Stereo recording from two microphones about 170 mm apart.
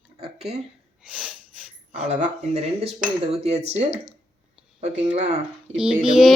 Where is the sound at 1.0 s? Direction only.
5° right (ahead or behind).